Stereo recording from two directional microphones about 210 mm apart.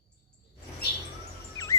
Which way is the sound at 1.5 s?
15° left (ahead or behind).